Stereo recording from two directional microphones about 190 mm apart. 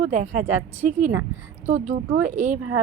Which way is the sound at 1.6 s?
40° right (ahead or behind).